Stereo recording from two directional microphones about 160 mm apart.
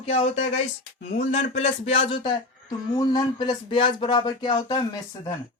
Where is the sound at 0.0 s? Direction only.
40° left (ahead or behind).